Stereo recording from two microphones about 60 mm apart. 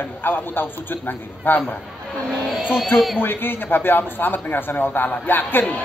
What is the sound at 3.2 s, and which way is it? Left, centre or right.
Speech, left.